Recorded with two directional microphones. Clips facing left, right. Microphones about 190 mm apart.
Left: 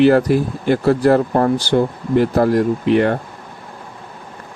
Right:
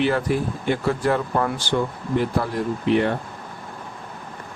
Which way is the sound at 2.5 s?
80° left.